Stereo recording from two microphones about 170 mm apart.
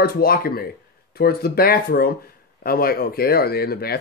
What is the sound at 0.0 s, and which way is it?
A man's voice, 65° left (ahead or behind).